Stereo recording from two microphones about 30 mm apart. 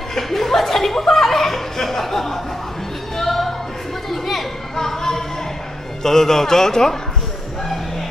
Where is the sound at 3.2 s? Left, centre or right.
Centre.